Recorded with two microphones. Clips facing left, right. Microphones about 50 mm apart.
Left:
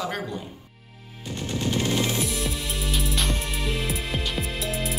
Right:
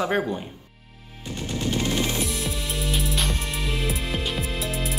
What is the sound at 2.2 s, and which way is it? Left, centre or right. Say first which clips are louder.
Music: even; centre.